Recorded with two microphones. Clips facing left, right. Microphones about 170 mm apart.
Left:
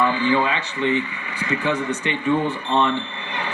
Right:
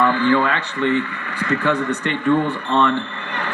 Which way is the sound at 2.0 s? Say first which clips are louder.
Right 3 dB; 15° left (ahead or behind).